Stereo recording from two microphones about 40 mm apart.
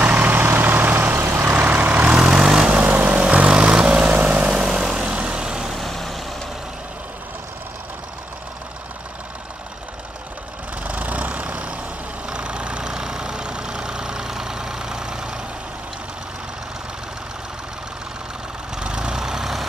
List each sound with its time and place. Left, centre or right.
0.0 s vehicle: right
1.6 s vehicle: right
2.1 s vehicle: centre
2.8 s vehicle: right
3.1 s vehicle: right
4.5 s vehicle: centre
5.7 s vehicle: centre
10.8 s vehicle: right; by 15.4 s centre
18.8 s vehicle: right
19.1 s vehicle: centre